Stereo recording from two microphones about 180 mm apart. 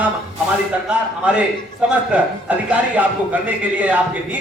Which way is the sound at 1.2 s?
5° right (ahead or behind).